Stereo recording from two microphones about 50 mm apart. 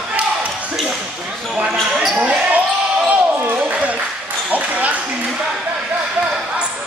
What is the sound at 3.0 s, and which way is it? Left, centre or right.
Basketball bounce, right.